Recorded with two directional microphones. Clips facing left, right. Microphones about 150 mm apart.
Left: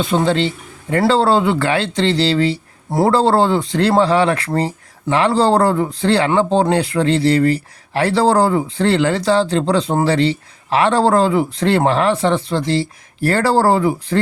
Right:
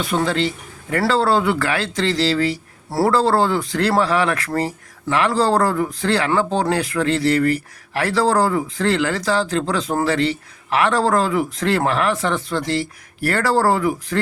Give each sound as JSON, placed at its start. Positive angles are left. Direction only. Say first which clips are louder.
{"t": 0.0, "sound": "speech", "louder": "left 4 dB", "side_deg": 25}